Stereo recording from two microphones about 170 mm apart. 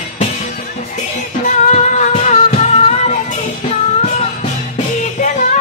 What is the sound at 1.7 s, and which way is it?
Music, 45° left (ahead or behind).